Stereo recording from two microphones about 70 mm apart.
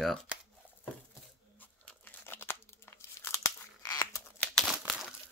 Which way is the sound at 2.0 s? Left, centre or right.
Left.